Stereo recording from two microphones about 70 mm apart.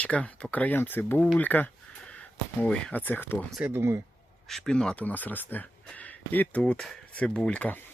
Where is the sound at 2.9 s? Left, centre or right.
Left.